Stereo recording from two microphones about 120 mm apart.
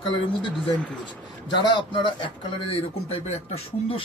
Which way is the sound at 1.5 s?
40° left (ahead or behind).